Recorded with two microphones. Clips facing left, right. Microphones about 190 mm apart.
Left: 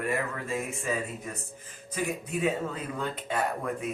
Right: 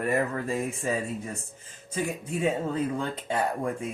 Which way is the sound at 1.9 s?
30° right (ahead or behind).